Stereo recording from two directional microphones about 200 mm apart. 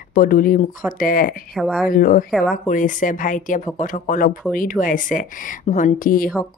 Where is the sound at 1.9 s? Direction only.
45° left (ahead or behind).